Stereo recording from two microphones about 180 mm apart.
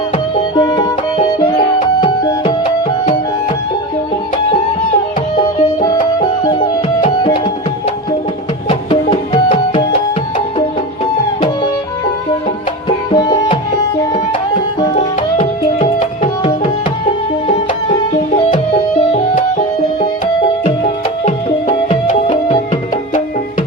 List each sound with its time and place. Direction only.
0.3 s music: 25° left (ahead or behind)
6.1 s music: 25° left (ahead or behind)
8.7 s music: 30° left (ahead or behind)
13.1 s music: 25° left (ahead or behind)
14.9 s music: 35° left (ahead or behind)
19.1 s music: 45° left (ahead or behind)
20.4 s music: 35° left (ahead or behind)